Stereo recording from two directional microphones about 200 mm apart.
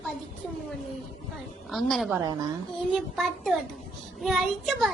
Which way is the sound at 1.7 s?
Centre (ahead or behind).